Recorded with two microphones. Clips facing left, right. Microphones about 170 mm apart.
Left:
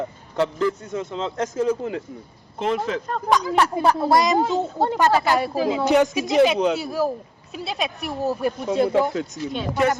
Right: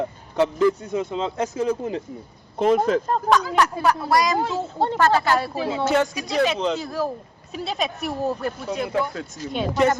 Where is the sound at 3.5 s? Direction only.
25° left (ahead or behind); by 8.4 s centre (ahead or behind).